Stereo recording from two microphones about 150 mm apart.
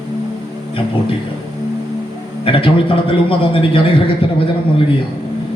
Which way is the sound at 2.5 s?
35° left (ahead or behind).